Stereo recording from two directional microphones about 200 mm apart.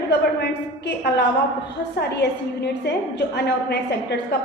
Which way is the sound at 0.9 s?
55° left (ahead or behind).